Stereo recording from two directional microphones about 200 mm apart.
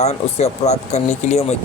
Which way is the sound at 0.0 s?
30° left (ahead or behind).